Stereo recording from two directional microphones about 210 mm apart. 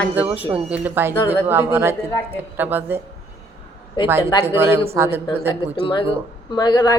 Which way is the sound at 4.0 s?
20° left (ahead or behind).